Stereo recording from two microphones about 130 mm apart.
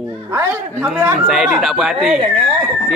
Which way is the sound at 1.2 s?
5° right (ahead or behind).